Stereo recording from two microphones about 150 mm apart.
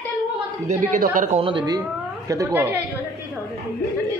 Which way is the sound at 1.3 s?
35° right (ahead or behind).